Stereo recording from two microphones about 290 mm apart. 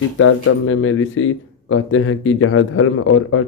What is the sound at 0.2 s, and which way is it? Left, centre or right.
Speech, left.